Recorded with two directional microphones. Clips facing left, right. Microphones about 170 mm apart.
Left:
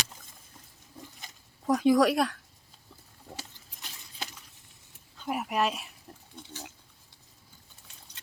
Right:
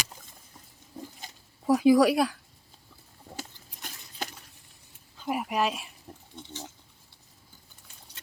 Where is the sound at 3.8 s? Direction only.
50° right (ahead or behind).